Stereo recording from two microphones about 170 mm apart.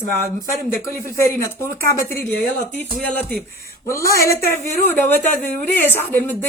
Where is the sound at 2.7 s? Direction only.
10° left (ahead or behind).